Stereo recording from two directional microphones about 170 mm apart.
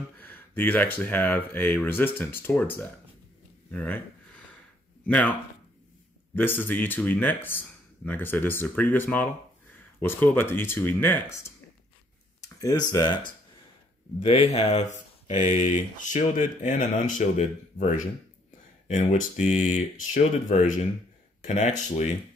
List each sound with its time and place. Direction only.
0.2 s speech: 10° left (ahead or behind)
5.0 s speech: 10° left (ahead or behind)
12.4 s speech: 20° left (ahead or behind)
14.2 s speech: 40° left (ahead or behind)